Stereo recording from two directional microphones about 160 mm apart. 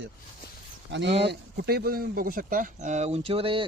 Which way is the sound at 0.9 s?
90° right.